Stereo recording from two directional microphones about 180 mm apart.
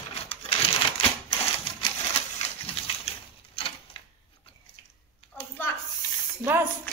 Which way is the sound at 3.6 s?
30° left (ahead or behind).